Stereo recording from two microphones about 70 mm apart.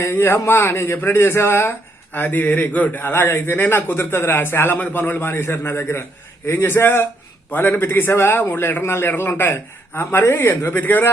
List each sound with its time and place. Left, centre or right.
0.0 s a man's voice: left
2.1 s a man's voice: left
10.8 s speech: left